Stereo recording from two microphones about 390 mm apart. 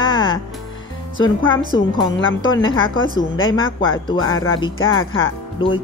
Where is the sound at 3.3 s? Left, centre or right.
Left.